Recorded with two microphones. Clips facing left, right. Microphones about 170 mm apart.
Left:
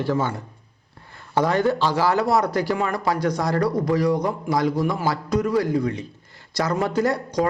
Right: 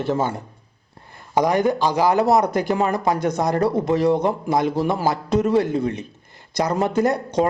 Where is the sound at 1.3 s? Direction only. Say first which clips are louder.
Right 2 dB; 15° right (ahead or behind).